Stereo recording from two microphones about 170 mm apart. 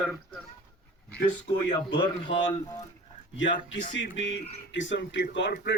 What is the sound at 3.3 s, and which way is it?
Speech, 90° left.